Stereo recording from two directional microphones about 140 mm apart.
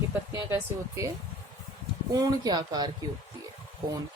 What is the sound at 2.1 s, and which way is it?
Speech, 30° right (ahead or behind).